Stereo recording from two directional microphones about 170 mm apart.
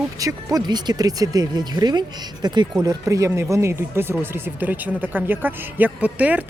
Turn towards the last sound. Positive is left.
turn(degrees=-10)  # may be behind; listen again after turning